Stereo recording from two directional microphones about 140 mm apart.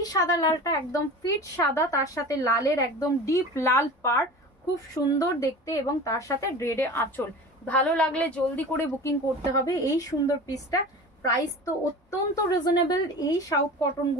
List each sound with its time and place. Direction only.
0.0 s a woman's voice: 25° left (ahead or behind)